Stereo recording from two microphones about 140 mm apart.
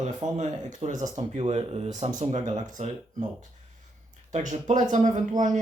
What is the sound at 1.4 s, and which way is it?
Speech, 45° right (ahead or behind).